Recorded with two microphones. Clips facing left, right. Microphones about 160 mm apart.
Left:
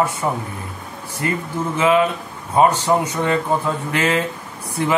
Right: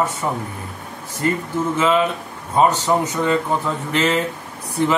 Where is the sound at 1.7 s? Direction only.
15° left (ahead or behind).